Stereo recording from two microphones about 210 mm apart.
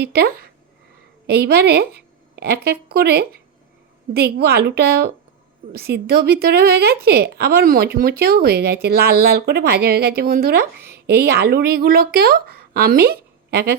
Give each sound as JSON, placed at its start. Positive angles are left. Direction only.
{"t": 0.0, "sound": "a woman's voice", "side_deg": -50}